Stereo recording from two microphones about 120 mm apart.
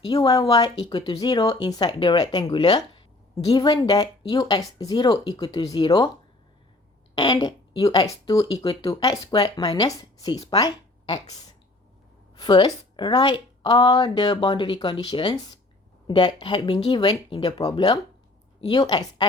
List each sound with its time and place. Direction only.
0.0 s speech: 30° left (ahead or behind)
7.2 s a woman's voice: 40° left (ahead or behind)